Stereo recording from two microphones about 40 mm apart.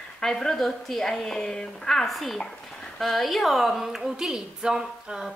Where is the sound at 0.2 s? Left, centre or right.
Centre.